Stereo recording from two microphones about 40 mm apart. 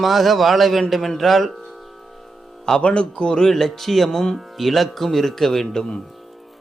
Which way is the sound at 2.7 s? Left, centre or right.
Left.